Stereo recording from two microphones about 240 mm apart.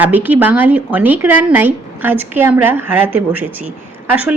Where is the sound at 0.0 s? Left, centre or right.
Centre.